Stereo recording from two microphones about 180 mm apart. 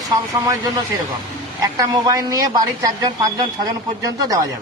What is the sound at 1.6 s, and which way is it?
A man's voice, 20° right (ahead or behind).